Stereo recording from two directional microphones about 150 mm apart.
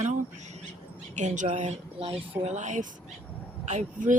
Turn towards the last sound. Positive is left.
turn(degrees=-55)  # may be behind; listen again after turning